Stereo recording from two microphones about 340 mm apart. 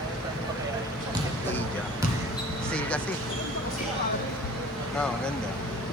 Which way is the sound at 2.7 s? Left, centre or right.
Centre.